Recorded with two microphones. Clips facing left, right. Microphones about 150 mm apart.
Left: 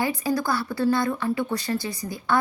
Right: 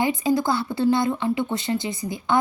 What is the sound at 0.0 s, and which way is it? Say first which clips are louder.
Speech: right 3 dB; 20° right (ahead or behind).